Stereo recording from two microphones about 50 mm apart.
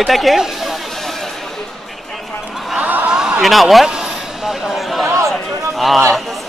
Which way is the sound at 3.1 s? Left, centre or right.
Centre.